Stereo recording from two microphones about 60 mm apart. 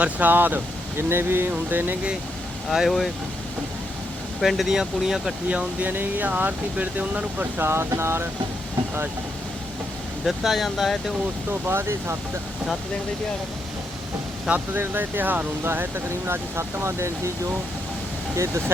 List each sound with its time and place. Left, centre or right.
0.0 s speech: right
0.9 s speech: right
2.6 s speech: centre
4.4 s speech: centre
5.5 s speech: right
5.9 s speech: right
7.6 s speech: right
10.2 s speech: centre
11.6 s speech: right
14.5 s speech: right